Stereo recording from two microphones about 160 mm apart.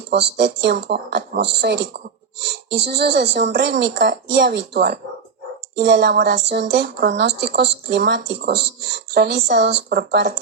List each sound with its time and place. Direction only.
0.1 s speech: 90° right